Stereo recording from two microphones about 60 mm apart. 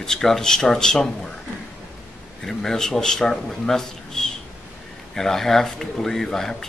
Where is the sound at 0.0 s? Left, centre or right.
Centre.